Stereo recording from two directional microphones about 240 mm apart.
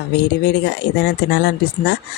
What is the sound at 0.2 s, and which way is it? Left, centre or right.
Speech, left.